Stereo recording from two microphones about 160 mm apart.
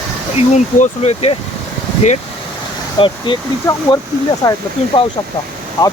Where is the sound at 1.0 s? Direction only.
40° left (ahead or behind).